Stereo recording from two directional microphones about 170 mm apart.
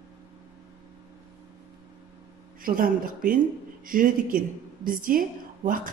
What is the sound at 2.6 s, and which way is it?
A woman's voice, 55° right (ahead or behind).